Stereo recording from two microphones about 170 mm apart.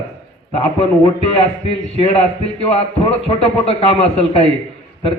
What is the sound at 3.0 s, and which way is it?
A man's voice, 35° left (ahead or behind).